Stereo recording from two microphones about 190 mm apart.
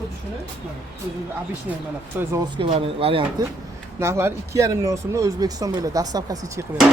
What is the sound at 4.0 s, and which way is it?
Speech, 15° right (ahead or behind).